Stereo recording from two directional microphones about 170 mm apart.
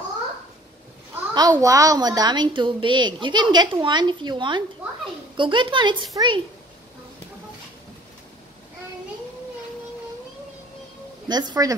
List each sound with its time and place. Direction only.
1.3 s a woman's voice: 20° right (ahead or behind)
11.2 s a woman's voice: 25° right (ahead or behind)